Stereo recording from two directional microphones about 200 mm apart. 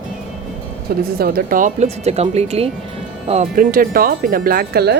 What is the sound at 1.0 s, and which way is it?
A woman's voice, 50° right (ahead or behind).